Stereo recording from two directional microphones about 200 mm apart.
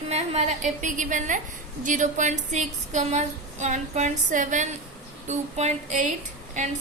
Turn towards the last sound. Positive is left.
turn(degrees=-35)  # may be behind; listen again after turning